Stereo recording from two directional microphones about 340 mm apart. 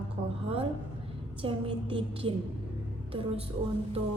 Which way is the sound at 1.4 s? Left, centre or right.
Centre.